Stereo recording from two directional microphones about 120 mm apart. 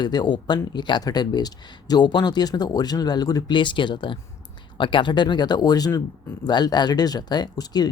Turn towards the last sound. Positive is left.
turn(degrees=35)  # may be behind; listen again after turning